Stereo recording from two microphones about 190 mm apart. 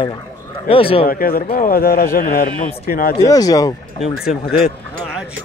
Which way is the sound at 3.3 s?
20° left (ahead or behind).